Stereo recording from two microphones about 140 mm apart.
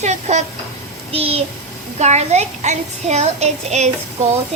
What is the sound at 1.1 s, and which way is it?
Speech, 45° right (ahead or behind).